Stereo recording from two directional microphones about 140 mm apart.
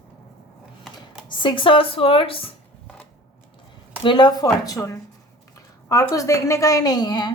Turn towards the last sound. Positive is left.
turn(degrees=30)  # may be behind; listen again after turning